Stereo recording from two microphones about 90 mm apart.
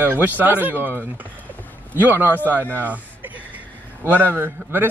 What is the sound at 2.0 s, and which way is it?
Speech, 20° right (ahead or behind).